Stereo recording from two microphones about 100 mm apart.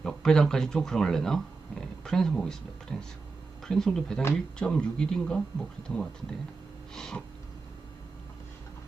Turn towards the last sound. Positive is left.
turn(degrees=5)  # may be behind; listen again after turning